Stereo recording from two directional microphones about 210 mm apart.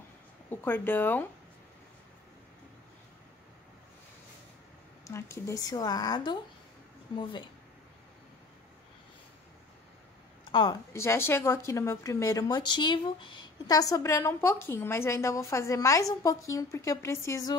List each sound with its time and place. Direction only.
0.5 s a woman's voice: 10° left (ahead or behind)
5.0 s a woman's voice: 15° left (ahead or behind)
10.5 s a woman's voice: 20° left (ahead or behind)